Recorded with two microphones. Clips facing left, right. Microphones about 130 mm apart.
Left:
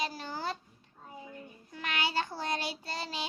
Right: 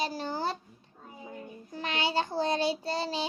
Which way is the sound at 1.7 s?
30° right (ahead or behind).